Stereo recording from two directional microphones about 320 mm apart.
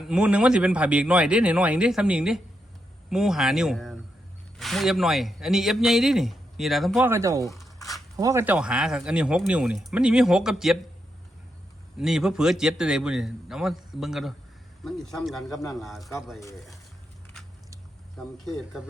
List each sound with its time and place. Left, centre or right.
0.0 s speech: centre
7.4 s zipper: centre
8.1 s speech: centre
11.9 s speech: centre
18.2 s speech: centre